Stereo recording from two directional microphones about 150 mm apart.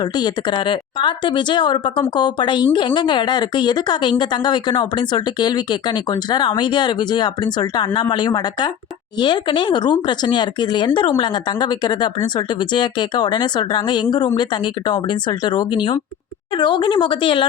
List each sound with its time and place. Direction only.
0.0 s a woman's voice: 25° left (ahead or behind)